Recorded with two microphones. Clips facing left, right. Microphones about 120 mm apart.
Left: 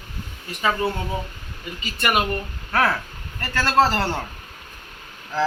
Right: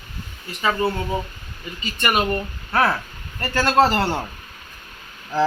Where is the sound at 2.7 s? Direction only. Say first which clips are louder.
Right 1 dB; 10° right (ahead or behind).